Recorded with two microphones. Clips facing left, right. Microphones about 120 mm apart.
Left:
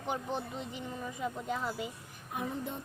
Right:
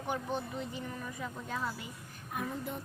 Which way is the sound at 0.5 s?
20° left (ahead or behind).